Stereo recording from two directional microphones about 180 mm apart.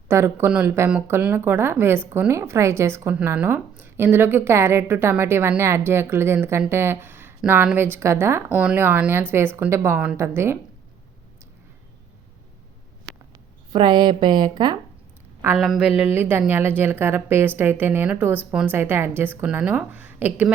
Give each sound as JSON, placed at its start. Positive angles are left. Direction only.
{"t": 0.1, "sound": "speech", "side_deg": -15}
{"t": 13.1, "sound": "a sound", "side_deg": -90}
{"t": 13.7, "sound": "speech", "side_deg": -25}
{"t": 15.5, "sound": "speech", "side_deg": 0}